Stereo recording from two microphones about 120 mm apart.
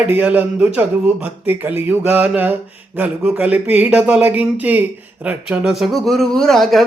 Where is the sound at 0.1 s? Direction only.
15° right (ahead or behind).